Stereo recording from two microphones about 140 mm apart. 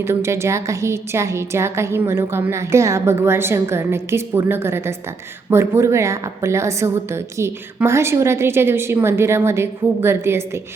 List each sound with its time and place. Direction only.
0.0 s a woman's voice: 20° right (ahead or behind)